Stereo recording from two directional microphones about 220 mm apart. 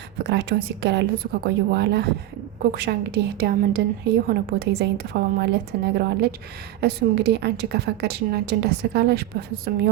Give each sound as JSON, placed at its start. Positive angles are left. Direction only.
{"t": 0.3, "sound": "a woman's voice", "side_deg": -50}